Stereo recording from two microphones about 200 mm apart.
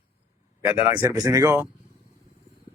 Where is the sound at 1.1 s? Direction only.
15° right (ahead or behind).